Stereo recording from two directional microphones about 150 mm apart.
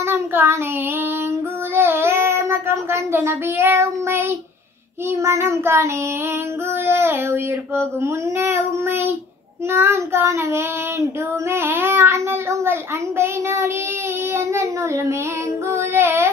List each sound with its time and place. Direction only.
0.0 s child singing: 15° right (ahead or behind)
1.8 s child singing: 15° right (ahead or behind)
6.9 s child singing: 15° right (ahead or behind)
11.5 s a child's voice: 15° right (ahead or behind)
13.2 s child singing: 20° right (ahead or behind)
14.3 s speech: 20° right (ahead or behind)
15.7 s child singing: 15° right (ahead or behind)